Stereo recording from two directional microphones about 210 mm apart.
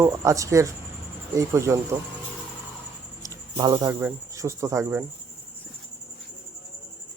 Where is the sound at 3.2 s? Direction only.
15° right (ahead or behind).